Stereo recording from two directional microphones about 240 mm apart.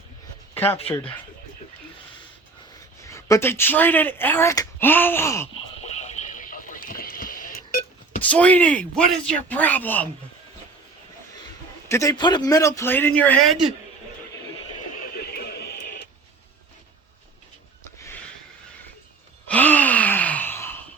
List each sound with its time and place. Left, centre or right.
0.5 s speech: centre
3.0 s speech: centre
5.8 s a sound: left
8.2 s speech: centre
11.9 s speech: centre
15.2 s radio: left
19.5 s gasp: centre